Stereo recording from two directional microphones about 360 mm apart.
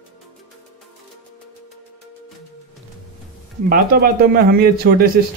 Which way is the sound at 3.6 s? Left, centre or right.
Right.